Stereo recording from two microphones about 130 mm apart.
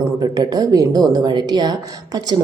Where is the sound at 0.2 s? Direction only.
30° right (ahead or behind).